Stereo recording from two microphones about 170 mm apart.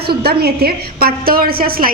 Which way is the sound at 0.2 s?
65° right (ahead or behind).